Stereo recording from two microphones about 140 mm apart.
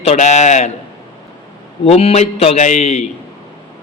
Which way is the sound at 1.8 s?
45° left (ahead or behind).